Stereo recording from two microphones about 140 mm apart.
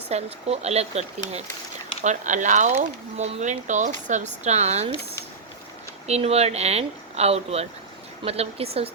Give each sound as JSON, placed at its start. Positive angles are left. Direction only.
{"t": 0.1, "sound": "speech", "side_deg": -45}
{"t": 6.1, "sound": "speech", "side_deg": -50}